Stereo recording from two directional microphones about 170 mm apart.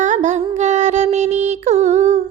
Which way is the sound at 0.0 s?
45° right (ahead or behind).